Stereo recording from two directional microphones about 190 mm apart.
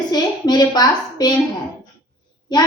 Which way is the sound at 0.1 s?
20° left (ahead or behind).